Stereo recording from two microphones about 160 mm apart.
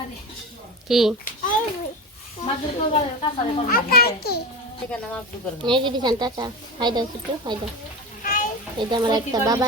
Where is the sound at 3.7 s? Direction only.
65° left (ahead or behind).